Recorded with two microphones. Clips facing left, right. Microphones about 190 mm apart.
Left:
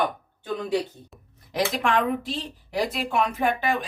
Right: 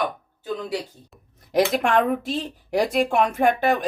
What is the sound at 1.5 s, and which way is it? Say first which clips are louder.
A woman's voice: right 4 dB; 50° right (ahead or behind).